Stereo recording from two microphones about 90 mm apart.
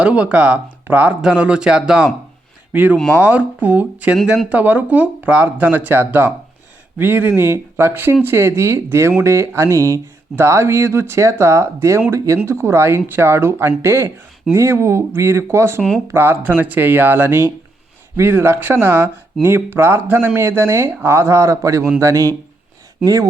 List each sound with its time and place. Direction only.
0.0 s speech: 15° right (ahead or behind); by 23.3 s 40° right (ahead or behind)